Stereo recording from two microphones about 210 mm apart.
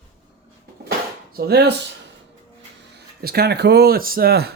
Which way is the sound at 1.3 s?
45° right (ahead or behind).